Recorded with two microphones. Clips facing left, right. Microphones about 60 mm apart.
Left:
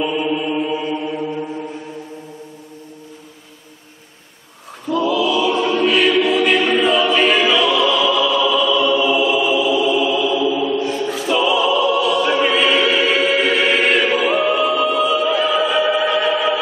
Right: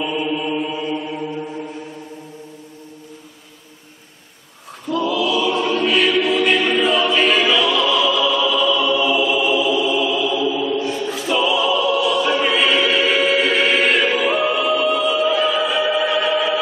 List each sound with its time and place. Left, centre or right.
0.0 s chant: centre
4.8 s choir: centre